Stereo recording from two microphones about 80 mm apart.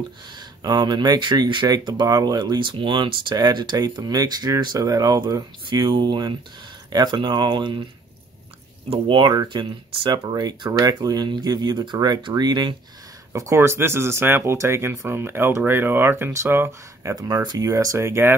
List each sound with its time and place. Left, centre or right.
0.3 s speech: right
4.7 s speech: right
6.9 s speech: right
9.0 s speech: right
10.7 s speech: right
13.3 s speech: right
17.1 s speech: right